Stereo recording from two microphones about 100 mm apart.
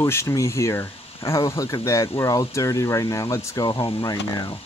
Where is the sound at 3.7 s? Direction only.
60° left (ahead or behind).